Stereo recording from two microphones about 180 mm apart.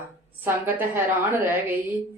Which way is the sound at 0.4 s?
10° right (ahead or behind).